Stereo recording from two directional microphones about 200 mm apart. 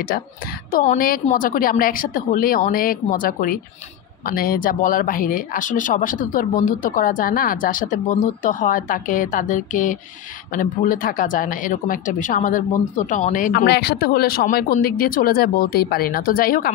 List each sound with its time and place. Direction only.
0.7 s speech: 45° left (ahead or behind)